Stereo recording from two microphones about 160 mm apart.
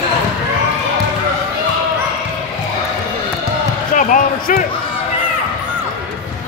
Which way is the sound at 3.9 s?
55° left (ahead or behind).